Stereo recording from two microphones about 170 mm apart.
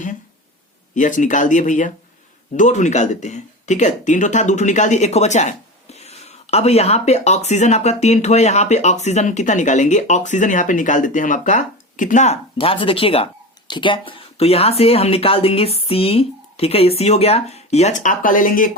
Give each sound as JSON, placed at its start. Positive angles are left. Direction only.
{"t": 0.9, "sound": "speech", "side_deg": 50}